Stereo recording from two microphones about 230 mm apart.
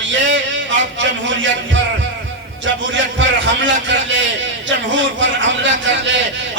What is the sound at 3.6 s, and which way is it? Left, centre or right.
A man's voice, right.